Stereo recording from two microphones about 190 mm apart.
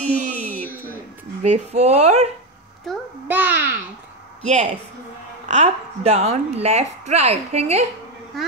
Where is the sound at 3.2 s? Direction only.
10° right (ahead or behind).